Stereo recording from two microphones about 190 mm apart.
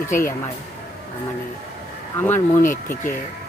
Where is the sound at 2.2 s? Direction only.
15° left (ahead or behind).